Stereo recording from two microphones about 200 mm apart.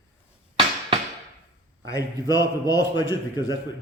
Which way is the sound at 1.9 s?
20° left (ahead or behind).